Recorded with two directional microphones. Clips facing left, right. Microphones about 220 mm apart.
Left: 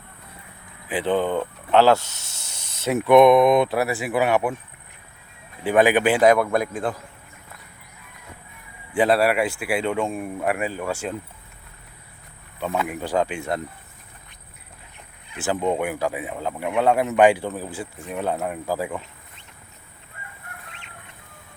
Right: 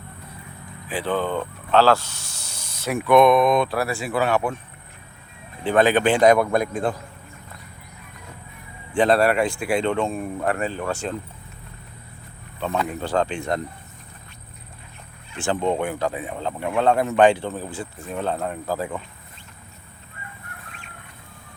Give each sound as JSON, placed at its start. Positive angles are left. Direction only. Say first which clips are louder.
{"t": 0.9, "sound": "speech", "louder": "left 2 dB", "side_deg": 20}
{"t": 5.6, "sound": "speech", "louder": "even", "side_deg": 10}
{"t": 9.0, "sound": "speech", "louder": "right 1 dB", "side_deg": 5}
{"t": 12.5, "sound": "speech", "louder": "right 1 dB", "side_deg": 10}
{"t": 15.3, "sound": "speech", "louder": "even", "side_deg": 5}